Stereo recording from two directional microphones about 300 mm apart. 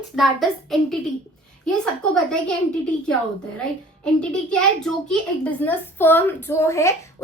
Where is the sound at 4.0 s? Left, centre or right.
Centre.